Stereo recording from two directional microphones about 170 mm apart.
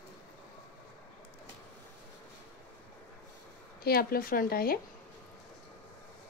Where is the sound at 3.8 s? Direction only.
60° left (ahead or behind).